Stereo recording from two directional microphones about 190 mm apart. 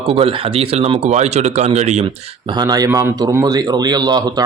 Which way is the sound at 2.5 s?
20° right (ahead or behind).